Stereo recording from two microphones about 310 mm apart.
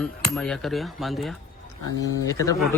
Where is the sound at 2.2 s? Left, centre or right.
Centre.